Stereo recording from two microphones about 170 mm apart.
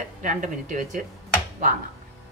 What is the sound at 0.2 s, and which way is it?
Speech, 50° right (ahead or behind).